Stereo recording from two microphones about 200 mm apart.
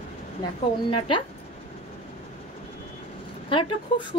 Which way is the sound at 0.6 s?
25° left (ahead or behind).